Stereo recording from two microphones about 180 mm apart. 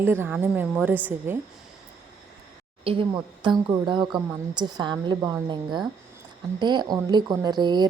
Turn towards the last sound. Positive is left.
turn(degrees=-25)  # may be behind; listen again after turning